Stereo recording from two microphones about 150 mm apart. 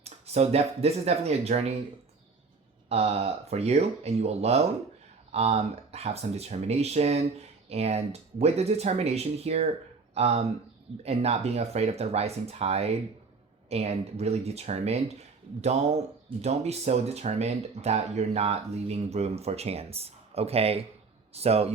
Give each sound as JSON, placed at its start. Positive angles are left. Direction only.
{"t": 0.0, "sound": "speech", "side_deg": -45}
{"t": 2.9, "sound": "speech", "side_deg": -45}